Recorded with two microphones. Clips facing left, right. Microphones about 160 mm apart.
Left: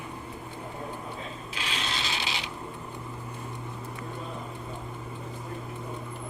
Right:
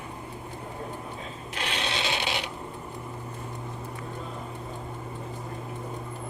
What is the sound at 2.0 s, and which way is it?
Filing, 60° right (ahead or behind).